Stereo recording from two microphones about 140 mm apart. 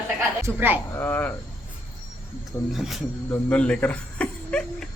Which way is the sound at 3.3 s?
10° left (ahead or behind).